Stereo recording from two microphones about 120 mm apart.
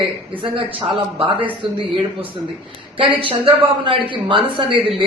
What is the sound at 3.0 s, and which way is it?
A man's voice, 45° right (ahead or behind).